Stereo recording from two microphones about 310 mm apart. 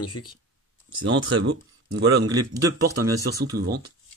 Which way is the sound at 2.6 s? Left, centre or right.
Right.